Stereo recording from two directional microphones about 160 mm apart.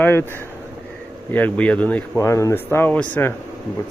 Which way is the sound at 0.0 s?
15° left (ahead or behind).